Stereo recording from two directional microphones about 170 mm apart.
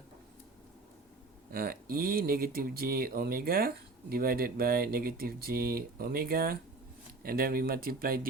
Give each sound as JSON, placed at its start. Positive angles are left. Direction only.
{"t": 1.5, "sound": "speech", "side_deg": -60}